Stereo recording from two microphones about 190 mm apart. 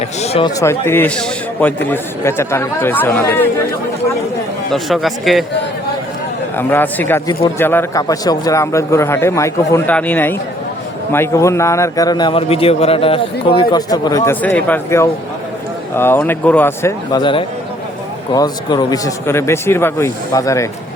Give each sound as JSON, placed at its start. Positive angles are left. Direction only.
{"t": 0.2, "sound": "a man's voice", "side_deg": 30}
{"t": 0.6, "sound": "a man's voice", "side_deg": 15}
{"t": 4.7, "sound": "speech", "side_deg": 0}
{"t": 6.6, "sound": "a man's voice", "side_deg": 10}